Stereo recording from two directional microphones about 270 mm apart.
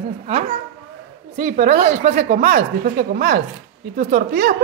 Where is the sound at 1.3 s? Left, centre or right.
Right.